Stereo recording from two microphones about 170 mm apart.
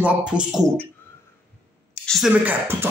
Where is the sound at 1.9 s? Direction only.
5° left (ahead or behind).